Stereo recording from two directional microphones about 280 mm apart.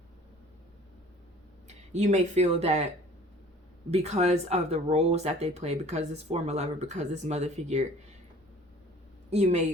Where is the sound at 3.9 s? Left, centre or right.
Right.